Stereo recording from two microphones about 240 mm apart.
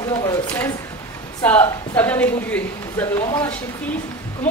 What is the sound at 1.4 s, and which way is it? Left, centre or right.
Speech, centre.